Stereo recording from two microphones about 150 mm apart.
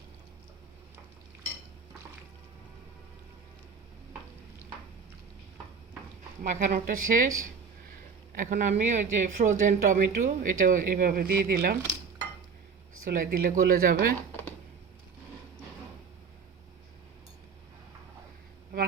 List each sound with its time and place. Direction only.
6.4 s speech: 60° right (ahead or behind)
8.4 s speech: 55° right (ahead or behind); by 11.8 s 90° right
13.1 s speech: 70° right (ahead or behind)